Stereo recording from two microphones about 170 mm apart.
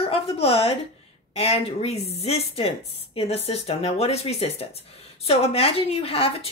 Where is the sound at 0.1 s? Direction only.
35° left (ahead or behind).